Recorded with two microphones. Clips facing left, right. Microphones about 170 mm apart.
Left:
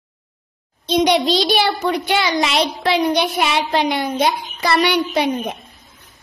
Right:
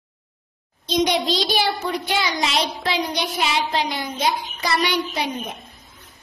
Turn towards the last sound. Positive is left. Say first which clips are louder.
# left 6 dB
turn(degrees=65)  # may be behind; listen again after turning